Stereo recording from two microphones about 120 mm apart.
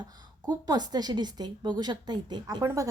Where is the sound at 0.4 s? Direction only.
35° right (ahead or behind).